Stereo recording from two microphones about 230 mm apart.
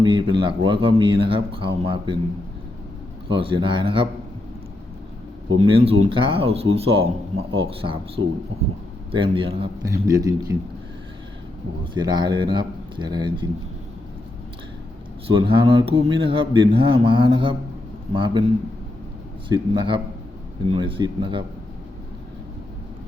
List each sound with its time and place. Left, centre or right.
0.0 s speech: centre
3.2 s speech: right
5.6 s a man's voice: right
11.9 s speech: centre
15.3 s speech: right
19.5 s speech: right